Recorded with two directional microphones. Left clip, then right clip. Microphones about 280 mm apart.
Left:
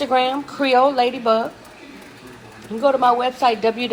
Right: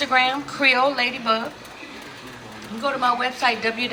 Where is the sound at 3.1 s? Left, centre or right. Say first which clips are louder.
Left 4 dB; centre.